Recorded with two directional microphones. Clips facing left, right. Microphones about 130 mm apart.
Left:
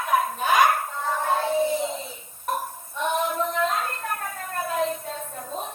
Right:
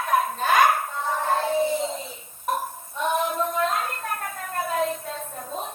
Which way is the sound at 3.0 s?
5° right (ahead or behind).